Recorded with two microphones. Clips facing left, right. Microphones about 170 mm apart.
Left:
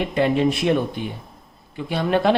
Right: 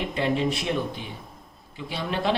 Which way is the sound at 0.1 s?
55° left (ahead or behind).